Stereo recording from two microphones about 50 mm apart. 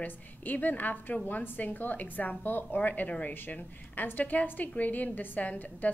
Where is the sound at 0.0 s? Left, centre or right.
Left.